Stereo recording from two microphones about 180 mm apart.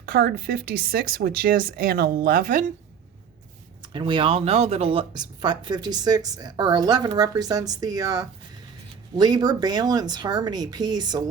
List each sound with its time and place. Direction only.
0.0 s speech: 60° right (ahead or behind)
3.9 s speech: 25° right (ahead or behind)